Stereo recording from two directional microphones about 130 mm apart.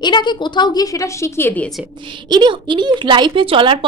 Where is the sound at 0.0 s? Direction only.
35° left (ahead or behind); by 1.7 s 15° left (ahead or behind).